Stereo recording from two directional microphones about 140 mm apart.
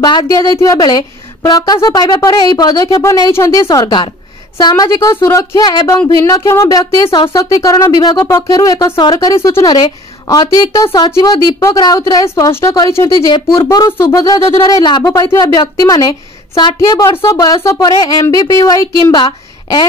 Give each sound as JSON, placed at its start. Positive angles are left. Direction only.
{"t": 0.0, "sound": "speech", "side_deg": 30}
{"t": 15.0, "sound": "a woman's voice", "side_deg": 20}